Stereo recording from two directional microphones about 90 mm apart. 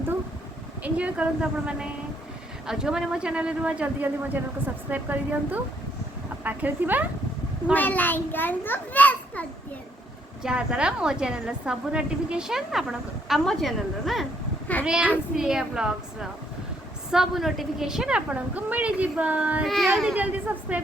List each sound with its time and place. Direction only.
0.8 s a man's voice: 15° right (ahead or behind)
7.7 s a child's voice: 20° left (ahead or behind)
10.4 s a man's voice: 10° right (ahead or behind)
15.4 s a man's voice: 5° right (ahead or behind)
19.6 s a woman's voice: centre (ahead or behind)
20.1 s a man's voice: 20° right (ahead or behind)